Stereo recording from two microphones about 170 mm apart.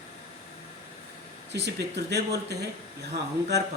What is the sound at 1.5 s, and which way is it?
Speech, 80° right.